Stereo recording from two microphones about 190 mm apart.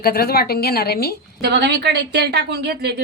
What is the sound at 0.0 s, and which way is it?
A woman's voice, 55° left (ahead or behind).